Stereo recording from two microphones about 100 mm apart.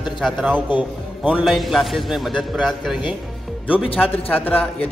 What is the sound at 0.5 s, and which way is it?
Speech, 15° right (ahead or behind).